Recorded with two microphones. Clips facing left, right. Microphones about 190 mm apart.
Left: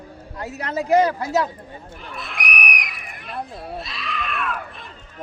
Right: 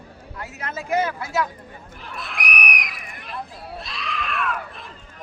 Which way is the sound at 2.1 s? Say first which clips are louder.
Even; centre (ahead or behind).